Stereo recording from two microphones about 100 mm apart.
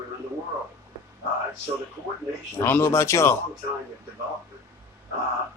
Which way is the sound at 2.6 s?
25° left (ahead or behind).